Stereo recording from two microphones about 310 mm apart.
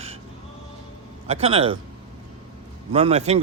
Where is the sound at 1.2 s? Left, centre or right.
Centre.